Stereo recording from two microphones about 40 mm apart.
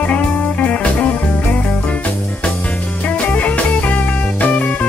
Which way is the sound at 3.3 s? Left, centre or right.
Left.